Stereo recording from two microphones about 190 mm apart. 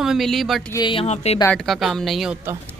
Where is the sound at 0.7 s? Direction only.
25° left (ahead or behind).